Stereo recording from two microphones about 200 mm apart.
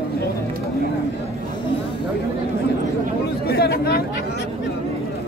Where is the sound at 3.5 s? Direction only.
50° left (ahead or behind).